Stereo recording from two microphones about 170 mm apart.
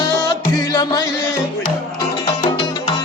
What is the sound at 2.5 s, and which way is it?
Music, 25° left (ahead or behind).